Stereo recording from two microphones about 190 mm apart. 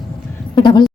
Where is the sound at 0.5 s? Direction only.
25° left (ahead or behind).